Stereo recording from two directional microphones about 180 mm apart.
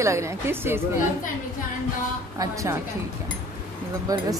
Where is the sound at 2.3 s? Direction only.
20° right (ahead or behind).